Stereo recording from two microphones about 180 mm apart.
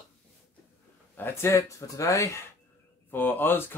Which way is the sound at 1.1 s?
15° left (ahead or behind).